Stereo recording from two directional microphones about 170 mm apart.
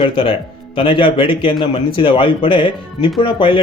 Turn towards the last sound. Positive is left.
turn(degrees=30)  # may be behind; listen again after turning